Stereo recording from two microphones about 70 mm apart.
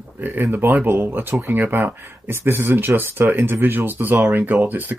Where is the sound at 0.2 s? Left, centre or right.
Right.